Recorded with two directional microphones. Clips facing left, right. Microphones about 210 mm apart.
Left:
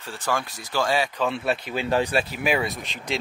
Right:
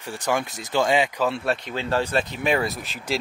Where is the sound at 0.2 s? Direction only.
20° right (ahead or behind).